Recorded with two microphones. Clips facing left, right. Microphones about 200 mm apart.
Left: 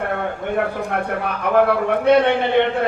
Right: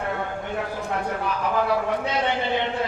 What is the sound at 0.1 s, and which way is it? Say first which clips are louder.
A man's voice: left 6 dB; 60° left (ahead or behind).